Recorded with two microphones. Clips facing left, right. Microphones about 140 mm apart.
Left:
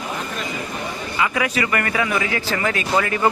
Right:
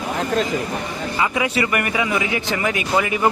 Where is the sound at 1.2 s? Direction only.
25° right (ahead or behind).